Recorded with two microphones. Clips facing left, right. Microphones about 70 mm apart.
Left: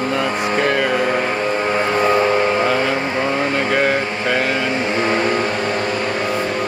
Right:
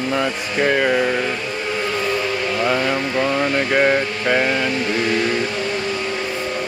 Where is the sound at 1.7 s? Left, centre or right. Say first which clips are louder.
Left 5 dB; left.